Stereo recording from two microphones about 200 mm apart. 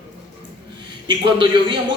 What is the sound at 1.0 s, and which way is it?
Speech, 25° right (ahead or behind).